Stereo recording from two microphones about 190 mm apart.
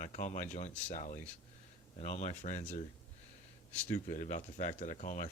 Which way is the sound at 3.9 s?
45° left (ahead or behind).